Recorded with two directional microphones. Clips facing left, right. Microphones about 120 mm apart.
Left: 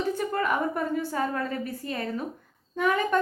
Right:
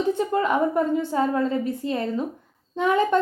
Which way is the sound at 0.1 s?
25° right (ahead or behind).